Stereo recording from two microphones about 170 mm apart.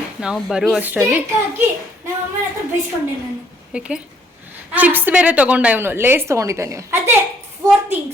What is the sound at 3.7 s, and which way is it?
A woman's voice, 5° right (ahead or behind).